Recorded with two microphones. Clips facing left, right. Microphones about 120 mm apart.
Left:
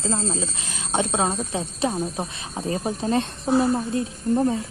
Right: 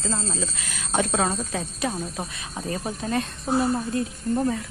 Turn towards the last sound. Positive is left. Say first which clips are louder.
# left 3 dB
turn(degrees=25)  # may be behind; listen again after turning